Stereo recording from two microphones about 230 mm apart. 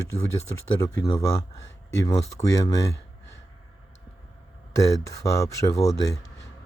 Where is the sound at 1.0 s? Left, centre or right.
Centre.